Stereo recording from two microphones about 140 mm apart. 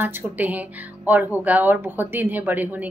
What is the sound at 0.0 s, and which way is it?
Speech, 15° right (ahead or behind).